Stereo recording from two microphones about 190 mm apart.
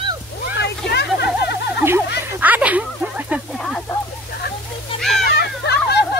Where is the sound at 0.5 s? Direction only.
60° left (ahead or behind).